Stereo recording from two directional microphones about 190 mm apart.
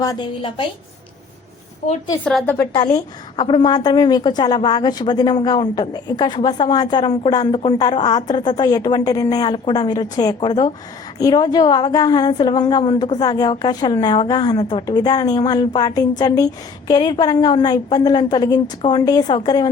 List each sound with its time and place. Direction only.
0.0 s a woman's voice: 20° left (ahead or behind)
2.2 s a woman's voice: 10° left (ahead or behind)
2.7 s a woman's voice: 20° left (ahead or behind)